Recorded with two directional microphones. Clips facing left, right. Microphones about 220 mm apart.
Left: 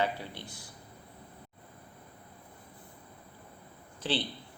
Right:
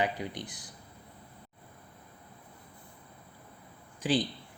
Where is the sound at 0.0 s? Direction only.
15° right (ahead or behind).